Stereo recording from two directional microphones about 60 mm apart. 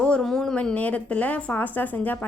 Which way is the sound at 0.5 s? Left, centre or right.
Left.